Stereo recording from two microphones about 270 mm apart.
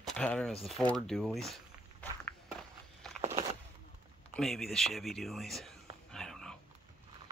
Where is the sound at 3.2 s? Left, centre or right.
Right.